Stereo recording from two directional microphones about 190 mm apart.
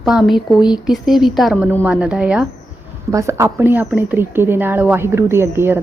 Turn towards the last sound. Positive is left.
turn(degrees=-10)  # may be behind; listen again after turning